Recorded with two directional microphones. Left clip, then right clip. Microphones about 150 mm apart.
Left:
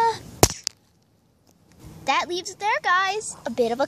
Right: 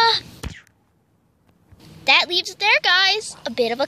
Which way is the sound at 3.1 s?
5° left (ahead or behind).